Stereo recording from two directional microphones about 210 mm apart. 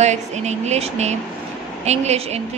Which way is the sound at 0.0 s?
35° right (ahead or behind).